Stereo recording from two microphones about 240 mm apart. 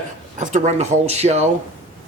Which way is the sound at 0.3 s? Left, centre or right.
Right.